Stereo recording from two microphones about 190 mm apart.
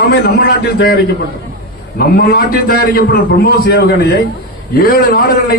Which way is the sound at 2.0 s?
55° left (ahead or behind).